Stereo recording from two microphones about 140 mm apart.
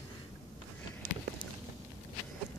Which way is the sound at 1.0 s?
65° right (ahead or behind).